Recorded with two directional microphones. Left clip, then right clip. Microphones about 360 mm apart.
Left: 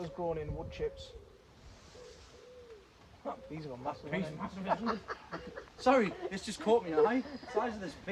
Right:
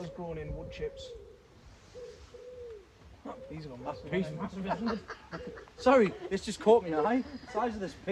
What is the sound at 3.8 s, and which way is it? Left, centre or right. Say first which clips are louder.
Speech: right 3 dB; centre.